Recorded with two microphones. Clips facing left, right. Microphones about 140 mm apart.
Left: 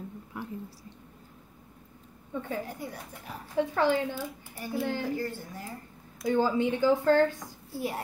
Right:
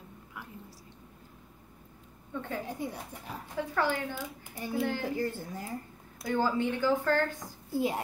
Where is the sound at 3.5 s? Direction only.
20° left (ahead or behind).